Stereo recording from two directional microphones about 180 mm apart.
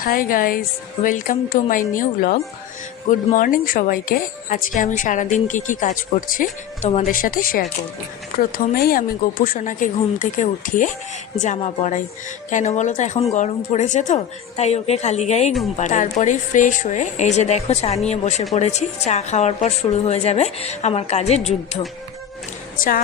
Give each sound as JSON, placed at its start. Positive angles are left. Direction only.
{"t": 0.0, "sound": "a woman's voice", "side_deg": 55}
{"t": 22.8, "sound": "speech", "side_deg": 50}